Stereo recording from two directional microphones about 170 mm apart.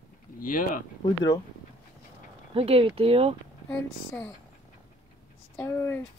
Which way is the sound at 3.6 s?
10° left (ahead or behind).